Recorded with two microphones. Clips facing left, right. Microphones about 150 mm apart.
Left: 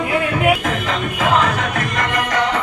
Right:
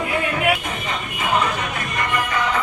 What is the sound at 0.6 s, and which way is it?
Music, 90° left.